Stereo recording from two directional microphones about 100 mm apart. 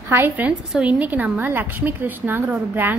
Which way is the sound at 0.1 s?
20° right (ahead or behind).